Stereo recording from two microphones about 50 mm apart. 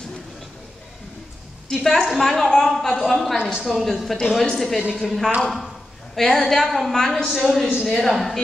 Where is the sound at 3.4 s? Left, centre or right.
Centre.